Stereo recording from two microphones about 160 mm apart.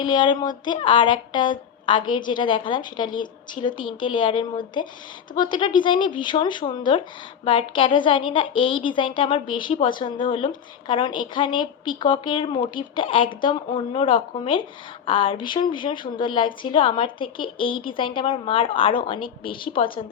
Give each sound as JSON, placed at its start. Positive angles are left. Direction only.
{"t": 0.0, "sound": "a woman's voice", "side_deg": 30}